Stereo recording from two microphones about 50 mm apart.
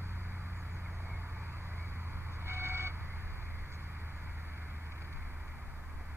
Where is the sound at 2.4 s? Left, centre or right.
Right.